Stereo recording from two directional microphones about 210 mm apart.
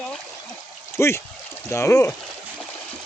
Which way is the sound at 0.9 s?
10° left (ahead or behind).